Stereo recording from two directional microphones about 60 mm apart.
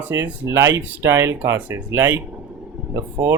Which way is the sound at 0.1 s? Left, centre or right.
Right.